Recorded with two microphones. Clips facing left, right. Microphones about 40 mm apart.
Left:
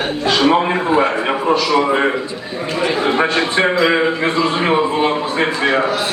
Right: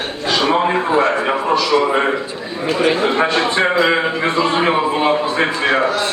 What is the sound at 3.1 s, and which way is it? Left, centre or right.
A man's voice, centre.